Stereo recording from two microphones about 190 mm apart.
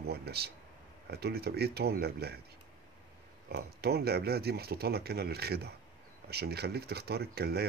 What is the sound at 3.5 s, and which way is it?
Speech, 55° right (ahead or behind).